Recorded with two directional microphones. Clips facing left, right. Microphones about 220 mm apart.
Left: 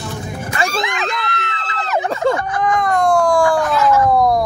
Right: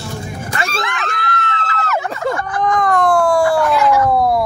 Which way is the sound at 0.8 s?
15° left (ahead or behind).